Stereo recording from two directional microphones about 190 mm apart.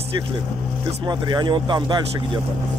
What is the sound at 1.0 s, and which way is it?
Speech, 25° right (ahead or behind).